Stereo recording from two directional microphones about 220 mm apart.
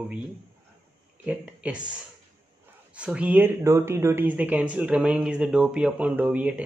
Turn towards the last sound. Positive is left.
turn(degrees=-5)  # may be behind; listen again after turning